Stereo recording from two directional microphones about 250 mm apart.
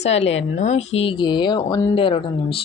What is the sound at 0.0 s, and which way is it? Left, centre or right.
Speech, left.